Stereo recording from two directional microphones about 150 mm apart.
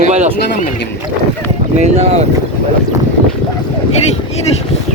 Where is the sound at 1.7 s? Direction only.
45° right (ahead or behind).